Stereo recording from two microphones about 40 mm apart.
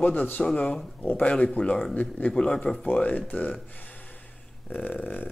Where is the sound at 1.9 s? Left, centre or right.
Left.